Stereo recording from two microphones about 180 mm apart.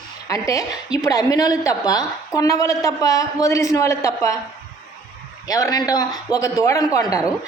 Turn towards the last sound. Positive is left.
turn(degrees=15)  # may be behind; listen again after turning